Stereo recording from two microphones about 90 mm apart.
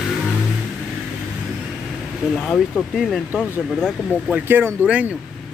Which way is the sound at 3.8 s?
Centre (ahead or behind).